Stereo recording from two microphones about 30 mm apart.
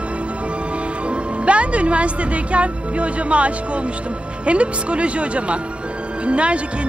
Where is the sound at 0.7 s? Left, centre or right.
Right.